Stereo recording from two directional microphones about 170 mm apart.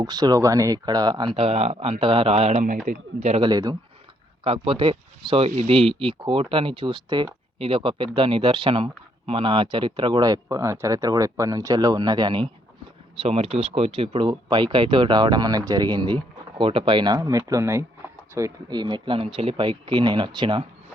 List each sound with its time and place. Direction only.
0.0 s speech: 25° right (ahead or behind); by 3.5 s 40° right (ahead or behind)
3.5 s speech: 25° right (ahead or behind)
4.4 s speech: 35° right (ahead or behind)